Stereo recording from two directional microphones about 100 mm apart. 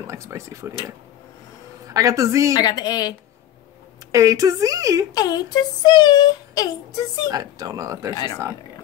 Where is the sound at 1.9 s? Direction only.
35° right (ahead or behind).